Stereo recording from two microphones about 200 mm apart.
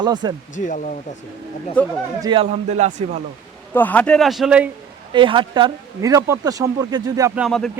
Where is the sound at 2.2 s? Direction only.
30° right (ahead or behind).